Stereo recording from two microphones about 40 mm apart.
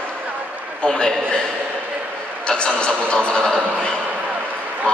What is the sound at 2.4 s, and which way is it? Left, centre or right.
A man's voice, left.